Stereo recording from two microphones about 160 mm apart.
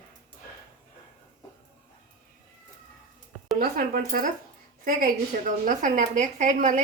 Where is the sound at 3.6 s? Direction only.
70° right (ahead or behind).